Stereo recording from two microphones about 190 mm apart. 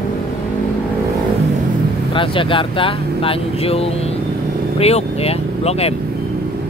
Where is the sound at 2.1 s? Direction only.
25° left (ahead or behind).